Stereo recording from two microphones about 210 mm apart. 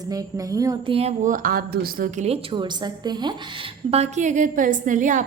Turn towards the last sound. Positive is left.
turn(degrees=-35)  # may be behind; listen again after turning